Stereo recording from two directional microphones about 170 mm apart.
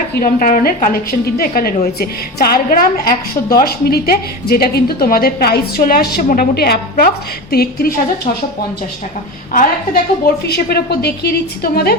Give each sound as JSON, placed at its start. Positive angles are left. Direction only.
{"t": 0.2, "sound": "a woman's voice", "side_deg": 55}
{"t": 9.5, "sound": "a woman's voice", "side_deg": 55}
{"t": 10.4, "sound": "a woman's voice", "side_deg": 70}